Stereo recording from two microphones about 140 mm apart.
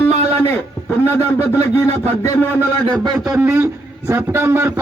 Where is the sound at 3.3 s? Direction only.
15° right (ahead or behind).